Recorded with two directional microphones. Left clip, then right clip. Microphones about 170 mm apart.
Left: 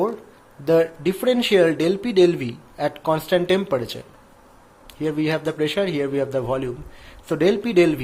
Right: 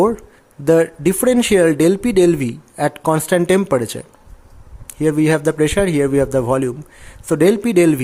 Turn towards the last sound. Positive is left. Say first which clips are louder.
# right 4 dB
turn(degrees=-55)  # may be behind; listen again after turning